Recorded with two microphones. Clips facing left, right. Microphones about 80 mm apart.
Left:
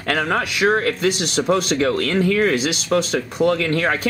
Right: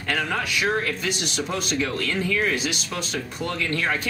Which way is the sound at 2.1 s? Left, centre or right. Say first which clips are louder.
Left 7 dB; left.